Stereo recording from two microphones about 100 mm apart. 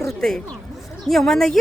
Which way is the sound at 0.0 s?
5° left (ahead or behind).